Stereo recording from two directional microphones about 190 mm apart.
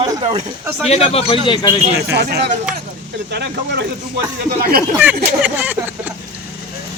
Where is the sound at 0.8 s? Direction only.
35° left (ahead or behind).